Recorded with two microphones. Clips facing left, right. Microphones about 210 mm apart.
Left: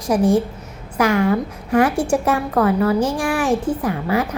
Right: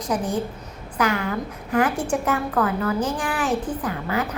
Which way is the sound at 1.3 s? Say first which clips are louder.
Left 7 dB; 30° left (ahead or behind).